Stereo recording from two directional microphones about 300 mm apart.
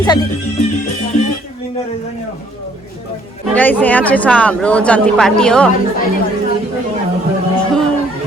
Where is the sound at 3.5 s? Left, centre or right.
Centre.